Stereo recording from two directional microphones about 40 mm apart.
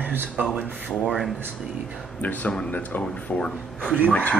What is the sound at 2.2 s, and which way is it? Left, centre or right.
Speech, left.